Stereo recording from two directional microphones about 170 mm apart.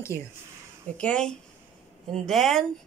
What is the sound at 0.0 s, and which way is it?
Speech, 15° left (ahead or behind).